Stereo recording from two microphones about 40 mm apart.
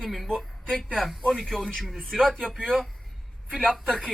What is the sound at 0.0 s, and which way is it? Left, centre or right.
A woman's voice, centre.